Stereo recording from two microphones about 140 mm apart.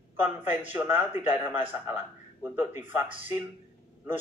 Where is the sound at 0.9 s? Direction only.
15° right (ahead or behind).